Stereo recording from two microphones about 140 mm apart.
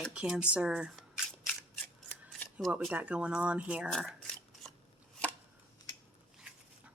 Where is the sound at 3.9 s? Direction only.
Centre (ahead or behind).